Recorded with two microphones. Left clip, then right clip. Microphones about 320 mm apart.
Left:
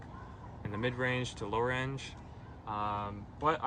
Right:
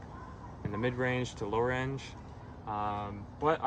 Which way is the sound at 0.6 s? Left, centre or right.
Centre.